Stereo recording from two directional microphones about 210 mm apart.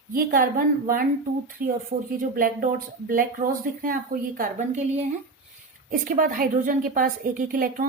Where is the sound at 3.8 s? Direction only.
40° right (ahead or behind).